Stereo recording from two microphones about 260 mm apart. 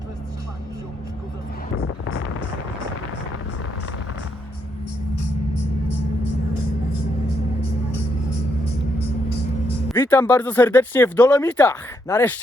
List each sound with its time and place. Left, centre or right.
1.7 s wind noise: left
9.9 s speech: centre